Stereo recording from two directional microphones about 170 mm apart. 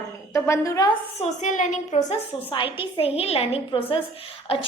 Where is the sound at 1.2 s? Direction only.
45° left (ahead or behind).